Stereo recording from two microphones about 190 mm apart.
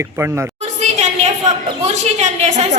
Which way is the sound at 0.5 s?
35° right (ahead or behind).